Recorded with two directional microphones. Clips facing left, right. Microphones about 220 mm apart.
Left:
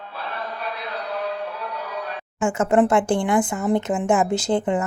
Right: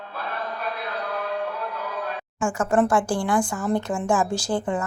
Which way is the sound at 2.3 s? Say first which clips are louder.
Left 3 dB; 20° left (ahead or behind).